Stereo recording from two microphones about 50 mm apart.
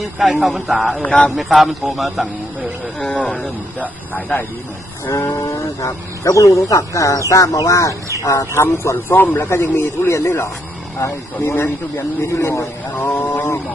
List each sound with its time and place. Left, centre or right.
0.3 s a man's voice: centre
1.0 s speech: left
1.4 s a man's voice: centre
3.0 s speech: centre
5.5 s speech: left
8.2 s speech: left
9.1 s a man's voice: left
9.6 s speech: left
12.2 s speech: left